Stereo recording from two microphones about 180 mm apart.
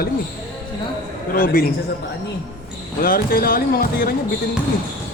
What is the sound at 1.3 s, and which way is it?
Speech, 50° left (ahead or behind).